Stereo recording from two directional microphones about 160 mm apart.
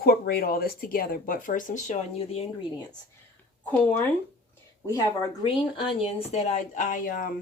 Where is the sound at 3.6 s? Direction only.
10° left (ahead or behind).